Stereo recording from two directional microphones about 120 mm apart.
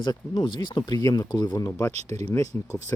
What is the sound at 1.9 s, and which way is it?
Speech, 65° right (ahead or behind).